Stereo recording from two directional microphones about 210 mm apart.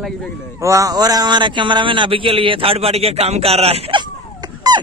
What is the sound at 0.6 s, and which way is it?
A man's voice, 15° right (ahead or behind).